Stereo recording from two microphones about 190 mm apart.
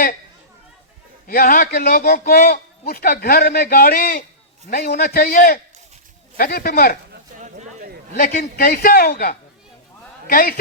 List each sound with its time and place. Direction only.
1.3 s a man's voice: 50° left (ahead or behind)
7.3 s a sound: 40° right (ahead or behind)
8.1 s a man's voice: 50° left (ahead or behind)